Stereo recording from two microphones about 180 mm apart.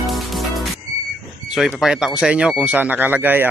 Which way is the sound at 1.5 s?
Centre (ahead or behind).